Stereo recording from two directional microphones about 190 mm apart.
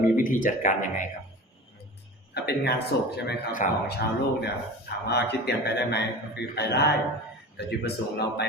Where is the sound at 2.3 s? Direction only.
60° left (ahead or behind).